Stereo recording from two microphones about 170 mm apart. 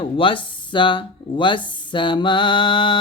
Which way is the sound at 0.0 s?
30° left (ahead or behind).